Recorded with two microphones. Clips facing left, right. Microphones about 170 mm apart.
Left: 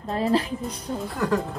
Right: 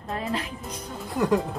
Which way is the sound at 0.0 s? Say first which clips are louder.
Left 7 dB; 35° left (ahead or behind).